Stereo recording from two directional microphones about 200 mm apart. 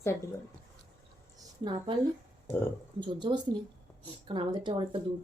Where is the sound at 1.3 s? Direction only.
20° right (ahead or behind).